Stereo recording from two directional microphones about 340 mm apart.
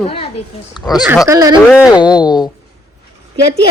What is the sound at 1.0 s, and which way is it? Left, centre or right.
Speech, centre.